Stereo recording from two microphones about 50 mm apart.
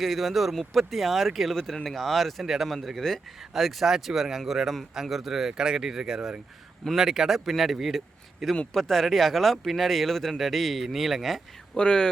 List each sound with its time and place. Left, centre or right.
0.0 s speech: centre
11.7 s speech: centre